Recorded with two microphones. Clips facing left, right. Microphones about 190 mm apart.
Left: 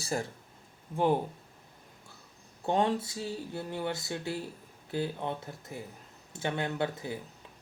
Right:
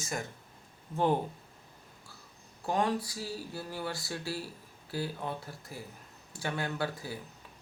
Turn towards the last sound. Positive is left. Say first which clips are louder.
# left 3 dB
turn(degrees=20)  # may be behind; listen again after turning